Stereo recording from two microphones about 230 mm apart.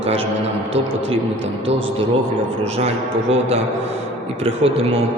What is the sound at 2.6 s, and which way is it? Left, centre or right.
Speech, right.